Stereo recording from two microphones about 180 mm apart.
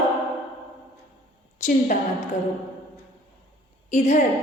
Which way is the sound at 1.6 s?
50° left (ahead or behind).